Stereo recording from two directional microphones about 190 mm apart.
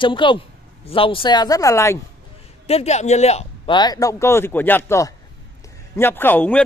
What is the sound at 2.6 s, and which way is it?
A man's voice, 35° left (ahead or behind).